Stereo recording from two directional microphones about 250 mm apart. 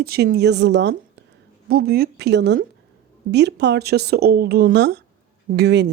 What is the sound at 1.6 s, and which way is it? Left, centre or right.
Speech, right.